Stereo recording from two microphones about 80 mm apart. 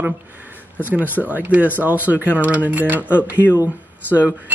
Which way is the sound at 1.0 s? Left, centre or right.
Left.